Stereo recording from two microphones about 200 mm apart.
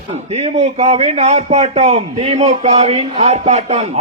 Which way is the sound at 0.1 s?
35° right (ahead or behind).